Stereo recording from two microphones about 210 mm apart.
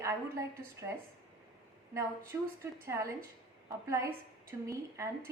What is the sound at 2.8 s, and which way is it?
A woman's voice, 15° right (ahead or behind).